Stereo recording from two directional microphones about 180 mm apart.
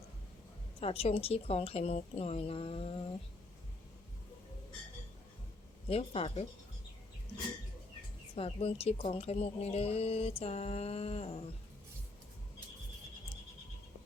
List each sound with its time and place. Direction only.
0.8 s speech: 35° left (ahead or behind)
5.9 s speech: 35° left (ahead or behind)
8.4 s speech: 35° left (ahead or behind)